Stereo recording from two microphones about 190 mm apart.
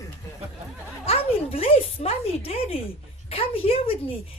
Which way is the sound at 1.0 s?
30° left (ahead or behind).